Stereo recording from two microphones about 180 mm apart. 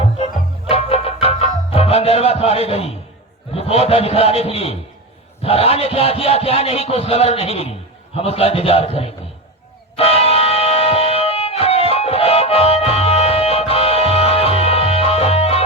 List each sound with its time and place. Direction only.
0.7 s music: 35° left (ahead or behind)
3.5 s speech: 35° left (ahead or behind)
9.9 s music: 35° left (ahead or behind)